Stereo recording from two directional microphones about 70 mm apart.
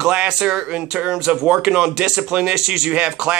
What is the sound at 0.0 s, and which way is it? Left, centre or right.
Speech, centre.